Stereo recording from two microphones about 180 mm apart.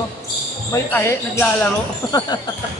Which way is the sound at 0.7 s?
15° left (ahead or behind).